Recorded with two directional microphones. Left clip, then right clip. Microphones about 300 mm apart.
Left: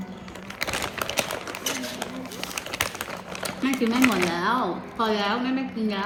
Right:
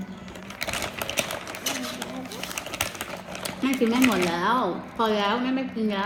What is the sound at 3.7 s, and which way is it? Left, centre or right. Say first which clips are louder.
Speech: even; centre.